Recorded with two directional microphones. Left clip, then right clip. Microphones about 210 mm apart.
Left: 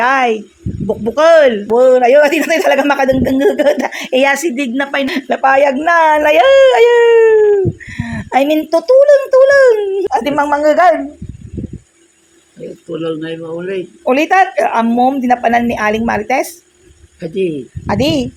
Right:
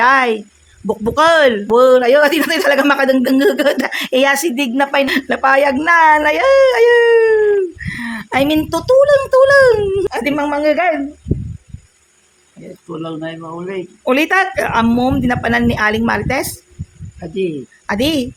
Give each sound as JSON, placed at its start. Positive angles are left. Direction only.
{"t": 0.0, "sound": "a woman's voice", "side_deg": 0}
{"t": 10.2, "sound": "speech", "side_deg": -15}
{"t": 13.0, "sound": "speech", "side_deg": -10}